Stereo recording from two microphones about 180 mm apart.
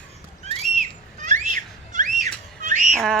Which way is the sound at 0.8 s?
45° right (ahead or behind).